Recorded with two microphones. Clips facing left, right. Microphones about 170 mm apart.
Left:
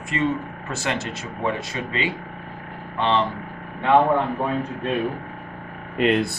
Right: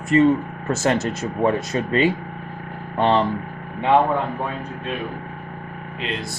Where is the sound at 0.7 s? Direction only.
45° right (ahead or behind).